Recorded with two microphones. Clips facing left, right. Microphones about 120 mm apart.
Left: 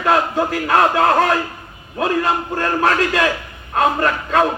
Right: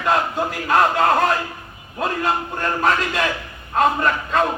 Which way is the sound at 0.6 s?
90° left.